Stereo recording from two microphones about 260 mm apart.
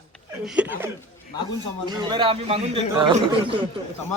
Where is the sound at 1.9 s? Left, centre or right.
Centre.